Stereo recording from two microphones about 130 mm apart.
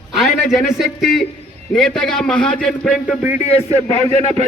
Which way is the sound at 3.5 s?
50° left (ahead or behind).